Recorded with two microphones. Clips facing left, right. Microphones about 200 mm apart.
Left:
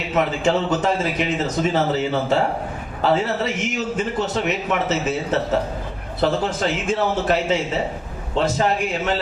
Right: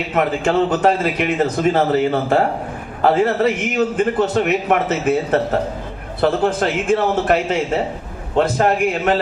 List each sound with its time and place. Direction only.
0.1 s a man's voice: 55° right (ahead or behind)